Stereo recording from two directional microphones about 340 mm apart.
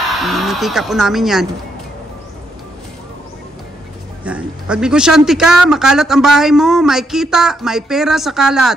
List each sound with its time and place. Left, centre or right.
0.1 s speech: centre
4.2 s speech: centre